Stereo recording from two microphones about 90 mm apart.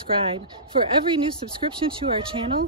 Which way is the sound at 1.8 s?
90° right.